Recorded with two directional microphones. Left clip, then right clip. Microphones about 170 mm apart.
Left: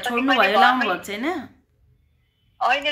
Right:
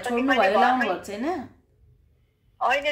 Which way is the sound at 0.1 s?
10° right (ahead or behind).